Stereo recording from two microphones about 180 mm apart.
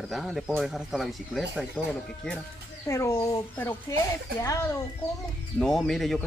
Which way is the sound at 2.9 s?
20° left (ahead or behind).